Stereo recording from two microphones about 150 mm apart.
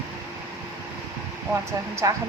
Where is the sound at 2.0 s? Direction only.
20° right (ahead or behind).